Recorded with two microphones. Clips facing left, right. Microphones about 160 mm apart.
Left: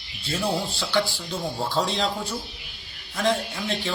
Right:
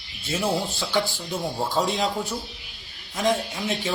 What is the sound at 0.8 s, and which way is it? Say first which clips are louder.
Speech: even; 20° right (ahead or behind).